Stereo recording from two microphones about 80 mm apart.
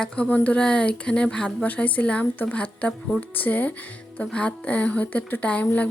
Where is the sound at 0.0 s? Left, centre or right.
Centre.